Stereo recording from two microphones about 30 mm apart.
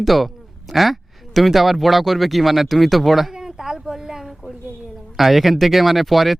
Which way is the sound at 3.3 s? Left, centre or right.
Centre.